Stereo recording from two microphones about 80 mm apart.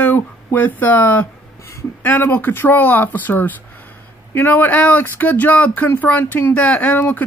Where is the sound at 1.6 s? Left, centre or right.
Left.